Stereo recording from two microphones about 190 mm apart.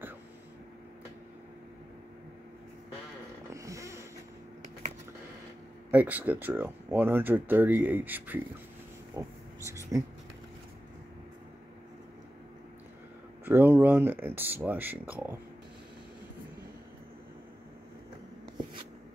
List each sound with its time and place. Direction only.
3.5 s a sound: 15° right (ahead or behind)
5.9 s speech: 10° right (ahead or behind)
13.5 s speech: 10° right (ahead or behind)